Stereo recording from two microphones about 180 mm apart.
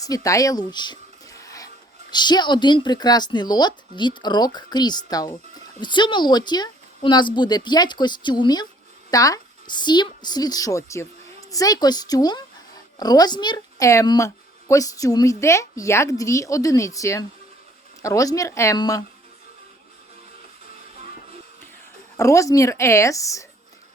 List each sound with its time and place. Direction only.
0.0 s a woman's voice: 20° left (ahead or behind)
22.2 s a woman's voice: 15° left (ahead or behind)